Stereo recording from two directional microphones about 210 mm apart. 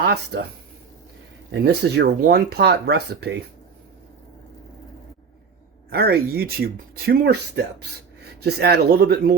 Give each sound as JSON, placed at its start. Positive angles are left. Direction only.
{"t": 0.0, "sound": "speech", "side_deg": -50}
{"t": 1.5, "sound": "speech", "side_deg": -50}
{"t": 5.9, "sound": "speech", "side_deg": -45}